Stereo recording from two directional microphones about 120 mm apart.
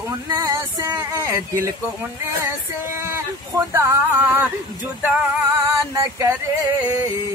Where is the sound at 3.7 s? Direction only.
15° right (ahead or behind).